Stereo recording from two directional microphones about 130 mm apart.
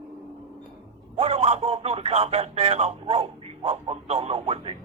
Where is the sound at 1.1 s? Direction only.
55° right (ahead or behind).